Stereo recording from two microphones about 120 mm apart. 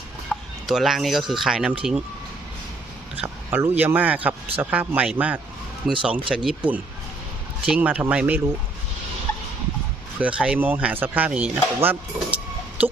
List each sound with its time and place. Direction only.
0.3 s a sound: 15° left (ahead or behind)
0.7 s speech: centre (ahead or behind)
3.2 s speech: 15° right (ahead or behind)
7.6 s speech: 10° right (ahead or behind)
10.2 s speech: 10° right (ahead or behind)
12.8 s music: 15° right (ahead or behind)